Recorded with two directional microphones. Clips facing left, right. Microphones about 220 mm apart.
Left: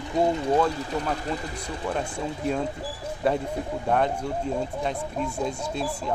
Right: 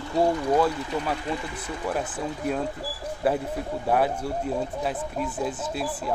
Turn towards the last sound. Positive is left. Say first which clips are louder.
# even
turn(degrees=-5)  # may be behind; listen again after turning